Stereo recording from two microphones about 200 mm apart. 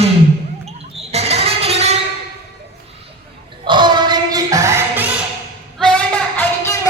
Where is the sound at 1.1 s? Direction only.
30° right (ahead or behind).